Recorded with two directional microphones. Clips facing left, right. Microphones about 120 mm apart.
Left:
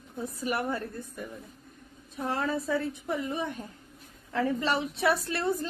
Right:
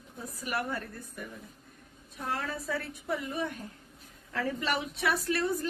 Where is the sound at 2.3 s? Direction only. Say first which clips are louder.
Left 5 dB; 25° left (ahead or behind).